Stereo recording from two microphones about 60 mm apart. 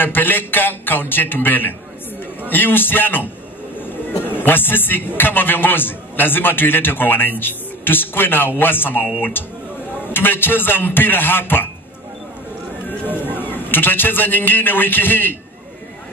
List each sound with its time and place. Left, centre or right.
0.0 s a man's voice: left
13.2 s a man's voice: left